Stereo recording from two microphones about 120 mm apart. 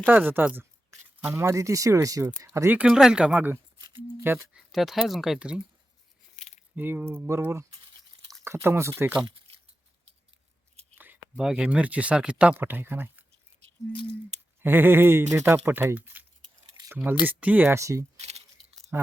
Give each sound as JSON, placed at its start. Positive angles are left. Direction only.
{"t": 0.1, "sound": "speech", "side_deg": -15}
{"t": 2.7, "sound": "speech", "side_deg": -5}
{"t": 4.5, "sound": "speech", "side_deg": 0}
{"t": 6.4, "sound": "keys jangling", "side_deg": 80}
{"t": 6.7, "sound": "speech", "side_deg": -15}
{"t": 10.9, "sound": "a sound", "side_deg": -15}
{"t": 11.3, "sound": "speech", "side_deg": -5}
{"t": 13.9, "sound": "speech", "side_deg": 45}
{"t": 14.6, "sound": "speech", "side_deg": -20}
{"t": 18.2, "sound": "a sound", "side_deg": -65}